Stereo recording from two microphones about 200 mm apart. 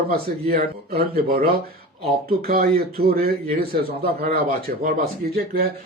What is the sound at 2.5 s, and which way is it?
A man's voice, 50° right (ahead or behind).